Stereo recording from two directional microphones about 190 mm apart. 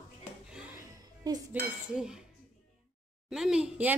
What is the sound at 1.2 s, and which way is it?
Speech, 20° right (ahead or behind).